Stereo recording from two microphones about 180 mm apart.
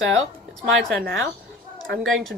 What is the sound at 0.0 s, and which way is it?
Speech, 90° right.